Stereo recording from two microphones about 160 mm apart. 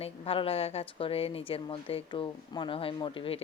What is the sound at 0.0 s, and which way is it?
Speech, 35° left (ahead or behind).